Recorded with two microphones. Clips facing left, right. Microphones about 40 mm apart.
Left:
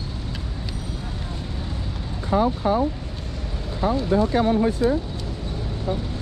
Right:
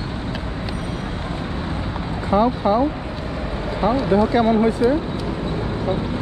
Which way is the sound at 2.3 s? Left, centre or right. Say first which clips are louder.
Right 3 dB; right.